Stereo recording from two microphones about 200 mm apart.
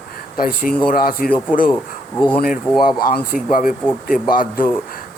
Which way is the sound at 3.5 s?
40° left (ahead or behind).